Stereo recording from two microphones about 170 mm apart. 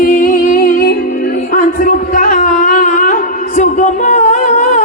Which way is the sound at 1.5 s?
50° left (ahead or behind).